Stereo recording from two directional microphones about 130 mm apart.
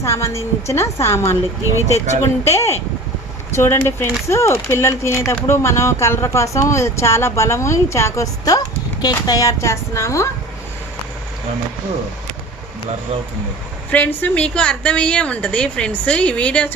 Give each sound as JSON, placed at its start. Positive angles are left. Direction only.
{"t": 0.0, "sound": "speech", "side_deg": 20}
{"t": 13.9, "sound": "a woman's voice", "side_deg": 10}